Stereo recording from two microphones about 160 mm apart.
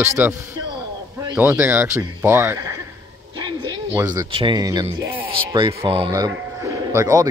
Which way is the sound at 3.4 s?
30° right (ahead or behind).